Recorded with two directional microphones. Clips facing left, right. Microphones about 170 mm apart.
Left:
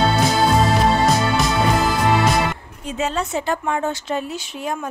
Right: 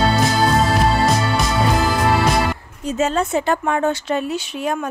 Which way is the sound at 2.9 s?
45° right (ahead or behind).